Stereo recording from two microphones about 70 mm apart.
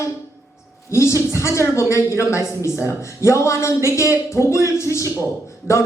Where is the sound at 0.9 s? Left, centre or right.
Left.